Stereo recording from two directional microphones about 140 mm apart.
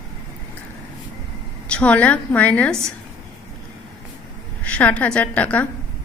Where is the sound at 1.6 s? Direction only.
10° left (ahead or behind).